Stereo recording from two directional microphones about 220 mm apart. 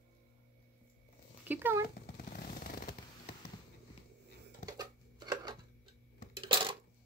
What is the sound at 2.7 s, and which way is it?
Fireworks, 40° left (ahead or behind).